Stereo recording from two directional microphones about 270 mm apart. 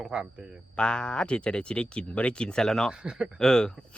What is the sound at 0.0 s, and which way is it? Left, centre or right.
Speech, centre.